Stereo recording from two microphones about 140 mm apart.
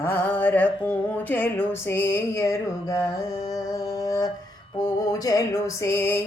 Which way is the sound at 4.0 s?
25° left (ahead or behind).